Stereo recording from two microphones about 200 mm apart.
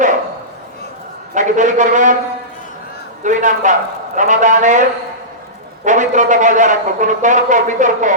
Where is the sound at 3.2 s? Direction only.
40° right (ahead or behind).